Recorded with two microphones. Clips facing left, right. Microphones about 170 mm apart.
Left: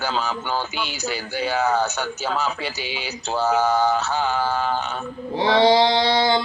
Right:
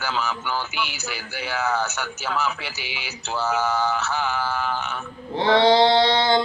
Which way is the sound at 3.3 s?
35° left (ahead or behind).